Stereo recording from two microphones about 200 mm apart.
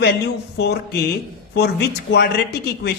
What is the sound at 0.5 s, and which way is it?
A man's voice, 55° left (ahead or behind).